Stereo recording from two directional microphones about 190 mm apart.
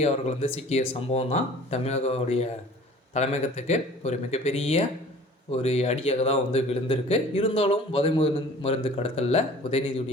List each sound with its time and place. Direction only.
0.0 s speech: 35° left (ahead or behind)